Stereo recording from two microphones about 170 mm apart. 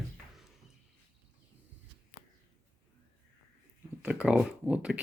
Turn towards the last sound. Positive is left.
turn(degrees=-10)  # may be behind; listen again after turning